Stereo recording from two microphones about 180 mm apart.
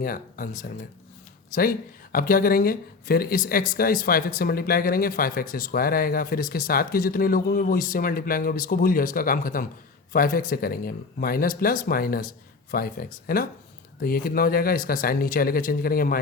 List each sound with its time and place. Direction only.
0.0 s speech: 55° left (ahead or behind)